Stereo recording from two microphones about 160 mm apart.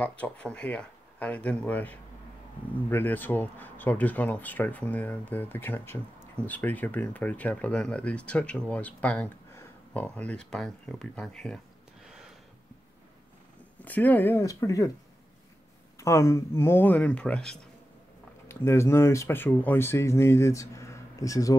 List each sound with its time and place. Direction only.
0.0 s speech: 10° left (ahead or behind)
13.8 s speech: 10° left (ahead or behind)
16.0 s speech: 15° left (ahead or behind)
18.5 s speech: 15° left (ahead or behind)